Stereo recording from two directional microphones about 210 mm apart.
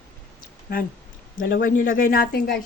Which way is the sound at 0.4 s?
45° left (ahead or behind).